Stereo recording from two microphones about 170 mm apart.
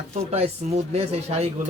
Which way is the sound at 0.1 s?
40° right (ahead or behind).